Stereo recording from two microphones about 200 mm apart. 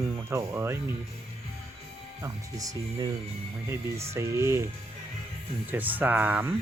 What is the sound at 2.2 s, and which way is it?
Speech, 15° right (ahead or behind).